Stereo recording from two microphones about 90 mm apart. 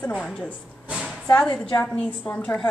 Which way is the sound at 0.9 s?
5° right (ahead or behind).